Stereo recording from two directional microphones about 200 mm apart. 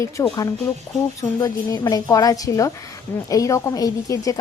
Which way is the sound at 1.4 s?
20° left (ahead or behind).